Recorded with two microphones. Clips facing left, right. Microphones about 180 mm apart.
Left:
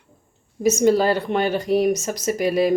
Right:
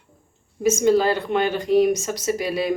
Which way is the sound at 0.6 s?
45° left (ahead or behind).